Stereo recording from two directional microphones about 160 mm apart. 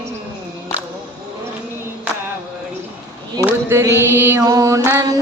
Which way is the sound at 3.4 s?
15° right (ahead or behind).